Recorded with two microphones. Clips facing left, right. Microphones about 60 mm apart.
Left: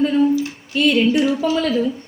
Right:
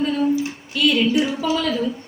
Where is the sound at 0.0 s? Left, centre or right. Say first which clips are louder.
Left 5 dB; left.